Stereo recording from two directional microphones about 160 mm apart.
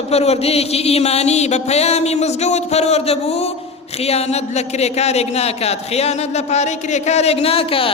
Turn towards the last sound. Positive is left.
turn(degrees=35)  # may be behind; listen again after turning